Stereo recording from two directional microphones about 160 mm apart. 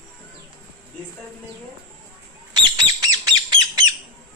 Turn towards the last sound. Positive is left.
turn(degrees=-25)  # may be behind; listen again after turning